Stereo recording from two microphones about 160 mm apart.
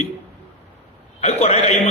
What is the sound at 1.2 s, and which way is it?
Speech, 40° left (ahead or behind).